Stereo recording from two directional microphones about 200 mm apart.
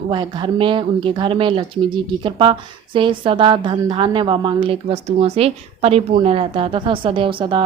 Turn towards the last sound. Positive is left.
turn(degrees=-25)  # may be behind; listen again after turning